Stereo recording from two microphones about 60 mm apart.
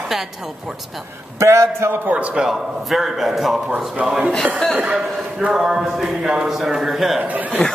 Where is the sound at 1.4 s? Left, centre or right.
Right.